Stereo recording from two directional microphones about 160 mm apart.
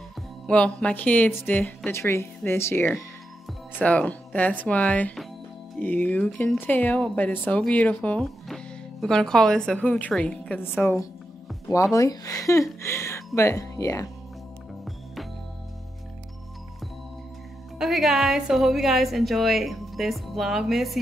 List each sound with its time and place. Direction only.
0.5 s speech: 10° left (ahead or behind)
17.7 s a woman's voice: centre (ahead or behind)